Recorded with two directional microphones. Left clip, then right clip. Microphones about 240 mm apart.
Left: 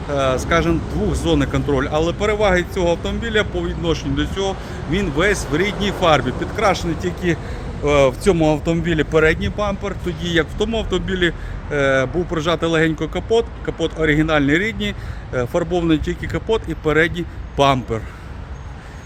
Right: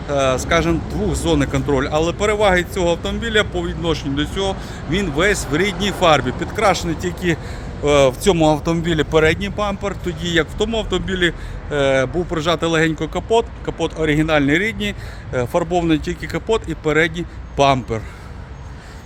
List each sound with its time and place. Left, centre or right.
0.1 s speech: centre